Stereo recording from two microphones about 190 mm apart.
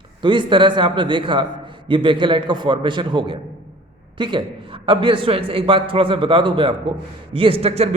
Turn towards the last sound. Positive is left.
turn(degrees=-30)  # may be behind; listen again after turning